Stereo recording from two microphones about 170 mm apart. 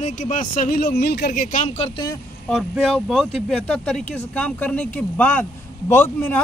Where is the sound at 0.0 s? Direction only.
50° left (ahead or behind).